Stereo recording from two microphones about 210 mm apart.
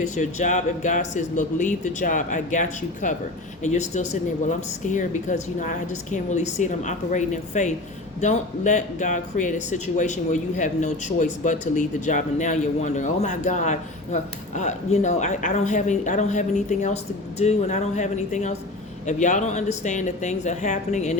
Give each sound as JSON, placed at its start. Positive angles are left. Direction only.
{"t": 0.0, "sound": "speech", "side_deg": 35}